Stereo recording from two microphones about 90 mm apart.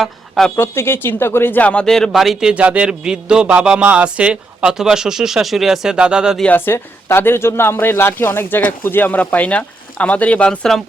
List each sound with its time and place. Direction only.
0.0 s speech: 5° left (ahead or behind)
0.5 s speech: 25° left (ahead or behind); by 6.4 s 10° right (ahead or behind)
6.4 s speech: 20° left (ahead or behind)